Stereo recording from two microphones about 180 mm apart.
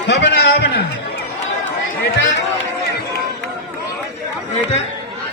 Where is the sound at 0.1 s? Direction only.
70° left (ahead or behind).